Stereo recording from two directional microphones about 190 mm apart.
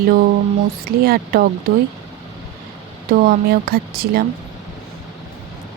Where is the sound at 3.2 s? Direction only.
55° right (ahead or behind).